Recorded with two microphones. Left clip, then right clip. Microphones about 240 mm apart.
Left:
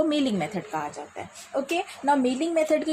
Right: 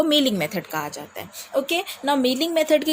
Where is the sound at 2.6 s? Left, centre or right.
Right.